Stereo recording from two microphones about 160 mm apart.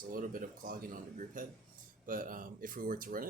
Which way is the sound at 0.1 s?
60° right (ahead or behind).